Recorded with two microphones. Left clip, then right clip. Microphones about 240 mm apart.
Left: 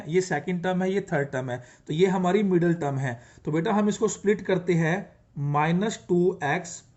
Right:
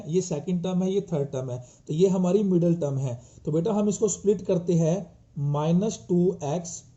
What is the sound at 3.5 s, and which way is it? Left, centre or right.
Speech, left.